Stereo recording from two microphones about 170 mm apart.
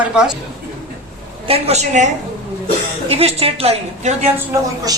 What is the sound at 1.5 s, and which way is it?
Speech, 40° right (ahead or behind).